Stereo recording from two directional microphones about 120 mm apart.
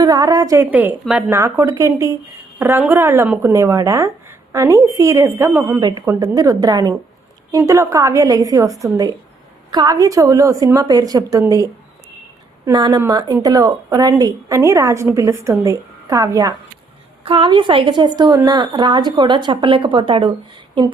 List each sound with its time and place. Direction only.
0.0 s a woman's voice: 30° right (ahead or behind)
0.7 s a woman's voice: 15° right (ahead or behind)
1.3 s a woman's voice: 25° right (ahead or behind)
12.7 s a woman's voice: 35° right (ahead or behind)
17.2 s a woman's voice: 45° right (ahead or behind)